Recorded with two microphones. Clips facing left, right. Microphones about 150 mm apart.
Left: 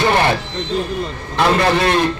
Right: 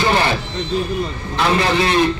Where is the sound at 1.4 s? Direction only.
55° left (ahead or behind).